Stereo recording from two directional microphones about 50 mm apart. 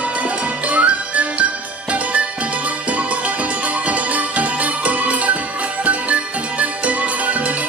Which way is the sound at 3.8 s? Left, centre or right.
Right.